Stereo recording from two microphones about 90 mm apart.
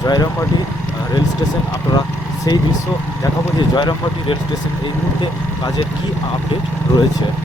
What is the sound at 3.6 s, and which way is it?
Speech, 55° left (ahead or behind).